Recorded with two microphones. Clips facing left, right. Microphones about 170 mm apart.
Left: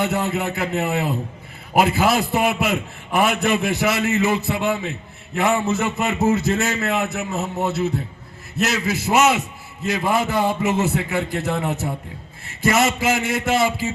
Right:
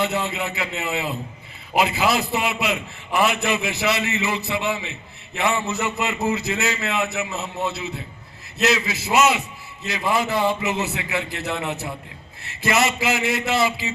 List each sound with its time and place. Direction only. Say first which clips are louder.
0.0 s a man's voice: left 2 dB; 55° left (ahead or behind)